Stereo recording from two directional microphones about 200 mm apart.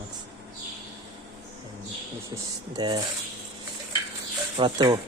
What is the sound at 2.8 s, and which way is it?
Speech, 20° right (ahead or behind).